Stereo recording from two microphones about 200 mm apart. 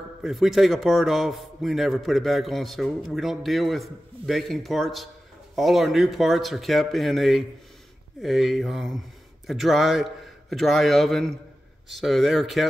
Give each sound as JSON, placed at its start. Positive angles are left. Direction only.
{"t": 0.2, "sound": "a man's voice", "side_deg": 0}